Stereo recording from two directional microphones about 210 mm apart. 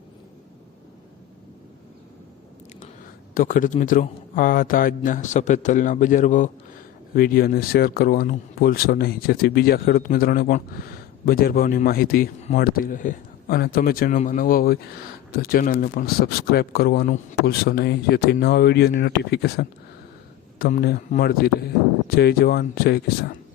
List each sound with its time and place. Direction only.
3.3 s a man's voice: 40° left (ahead or behind)